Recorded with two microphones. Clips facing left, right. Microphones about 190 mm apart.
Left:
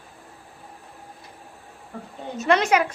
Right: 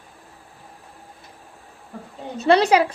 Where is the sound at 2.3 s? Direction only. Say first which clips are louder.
Right 4 dB; 35° right (ahead or behind).